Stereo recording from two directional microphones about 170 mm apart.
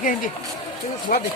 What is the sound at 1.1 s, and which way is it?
Speech, 50° left (ahead or behind).